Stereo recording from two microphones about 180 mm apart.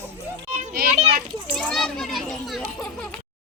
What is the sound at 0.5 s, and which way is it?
Children playing, 55° right (ahead or behind).